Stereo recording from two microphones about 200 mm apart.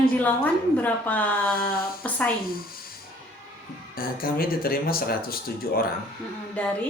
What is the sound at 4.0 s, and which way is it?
Speech, 45° left (ahead or behind).